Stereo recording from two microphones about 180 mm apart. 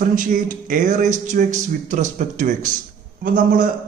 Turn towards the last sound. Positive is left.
turn(degrees=-50)  # may be behind; listen again after turning